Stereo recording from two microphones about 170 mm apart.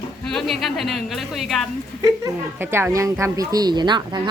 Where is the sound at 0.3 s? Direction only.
Centre (ahead or behind).